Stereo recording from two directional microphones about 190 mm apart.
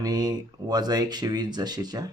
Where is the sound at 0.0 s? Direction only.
20° right (ahead or behind).